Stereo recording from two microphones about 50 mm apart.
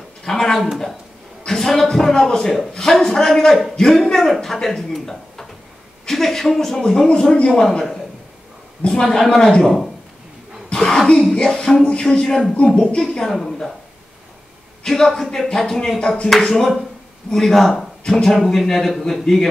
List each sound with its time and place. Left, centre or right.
0.2 s a sound: centre
1.4 s a man's voice: centre
2.7 s music: centre
3.7 s a man's voice: centre
6.0 s music: centre
8.8 s music: centre
10.7 s a sound: centre
11.3 s music: centre
13.2 s a man's voice: centre
14.9 s music: centre
16.0 s music: centre
17.3 s a man's voice: centre